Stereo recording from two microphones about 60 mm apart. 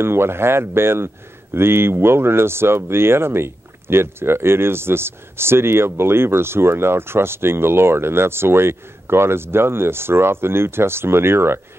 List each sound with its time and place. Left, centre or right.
0.0 s speech: right